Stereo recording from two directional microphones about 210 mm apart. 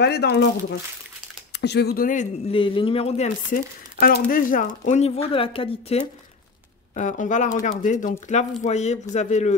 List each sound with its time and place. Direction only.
0.0 s speech: 50° left (ahead or behind)
2.5 s speech: 25° left (ahead or behind)
3.5 s speech: 45° left (ahead or behind)